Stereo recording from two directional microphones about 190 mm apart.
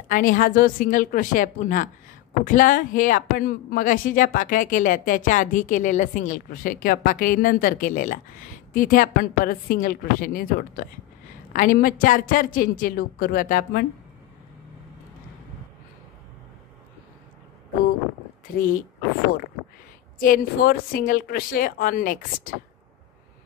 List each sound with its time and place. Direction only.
0.1 s a woman's voice: 45° left (ahead or behind)
20.2 s a woman's voice: 50° left (ahead or behind)